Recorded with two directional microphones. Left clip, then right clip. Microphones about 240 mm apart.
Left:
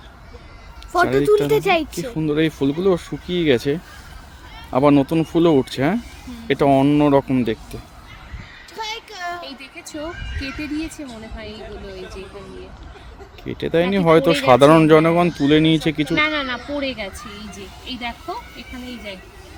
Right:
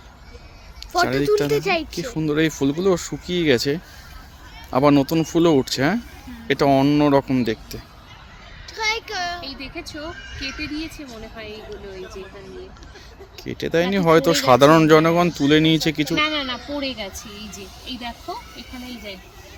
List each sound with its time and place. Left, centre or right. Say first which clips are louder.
1.1 s speech: left 3 dB; left
2.1 s speech: left 1 dB; centre
8.7 s a sound: right 6 dB; left
13.4 s speech: left 2 dB; centre